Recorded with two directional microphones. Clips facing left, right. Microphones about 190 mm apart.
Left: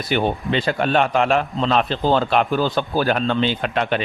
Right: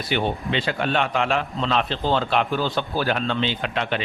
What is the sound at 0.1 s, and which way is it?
A man's voice, 45° left (ahead or behind).